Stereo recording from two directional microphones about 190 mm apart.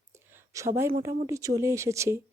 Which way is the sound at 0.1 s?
15° right (ahead or behind).